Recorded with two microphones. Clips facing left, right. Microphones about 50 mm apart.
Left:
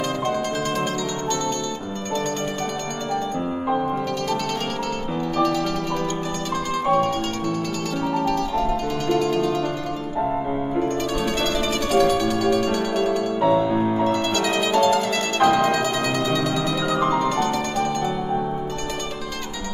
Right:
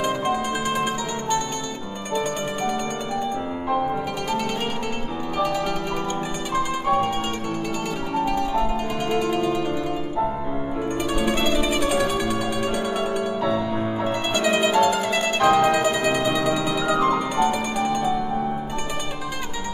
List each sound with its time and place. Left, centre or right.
0.0 s zither: centre
3.7 s music: centre
5.4 s music: centre
11.1 s music: centre
13.4 s music: centre
13.7 s music: centre
14.0 s music: centre